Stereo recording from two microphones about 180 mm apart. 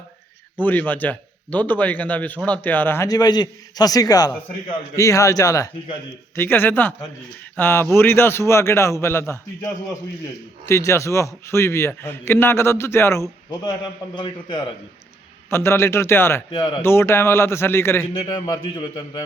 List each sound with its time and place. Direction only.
0.6 s a man's voice: 10° left (ahead or behind)
10.7 s a man's voice: 15° left (ahead or behind)
15.4 s a man's voice: 15° left (ahead or behind)
16.5 s a man's voice: 25° left (ahead or behind)
16.8 s a man's voice: 15° left (ahead or behind)
18.3 s a man's voice: 25° left (ahead or behind)